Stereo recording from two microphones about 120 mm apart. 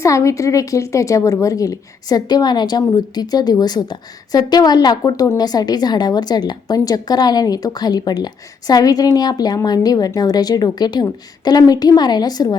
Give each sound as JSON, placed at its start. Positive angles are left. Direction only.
{"t": 0.0, "sound": "a woman's voice", "side_deg": 25}